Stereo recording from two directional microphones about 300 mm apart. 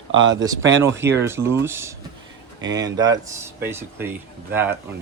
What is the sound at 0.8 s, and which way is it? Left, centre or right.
Speech, centre.